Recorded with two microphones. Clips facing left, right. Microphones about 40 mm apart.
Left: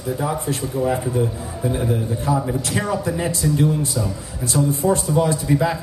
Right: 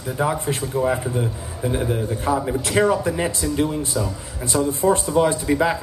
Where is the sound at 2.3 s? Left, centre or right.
Right.